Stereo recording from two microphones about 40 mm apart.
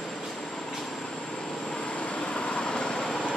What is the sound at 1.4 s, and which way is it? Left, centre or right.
Vehicle, centre.